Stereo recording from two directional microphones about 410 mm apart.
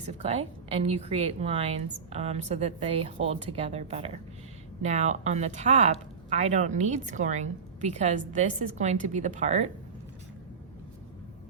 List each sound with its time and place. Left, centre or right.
0.0 s a woman's voice: centre